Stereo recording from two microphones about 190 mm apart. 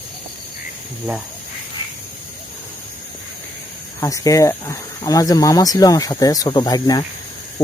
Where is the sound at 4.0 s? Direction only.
15° left (ahead or behind).